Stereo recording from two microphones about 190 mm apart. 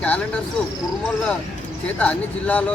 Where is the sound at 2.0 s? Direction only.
5° left (ahead or behind).